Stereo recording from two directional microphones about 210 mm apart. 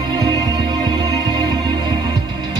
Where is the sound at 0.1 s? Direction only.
20° right (ahead or behind).